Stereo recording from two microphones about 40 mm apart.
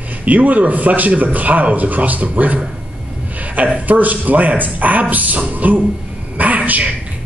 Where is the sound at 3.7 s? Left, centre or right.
Right.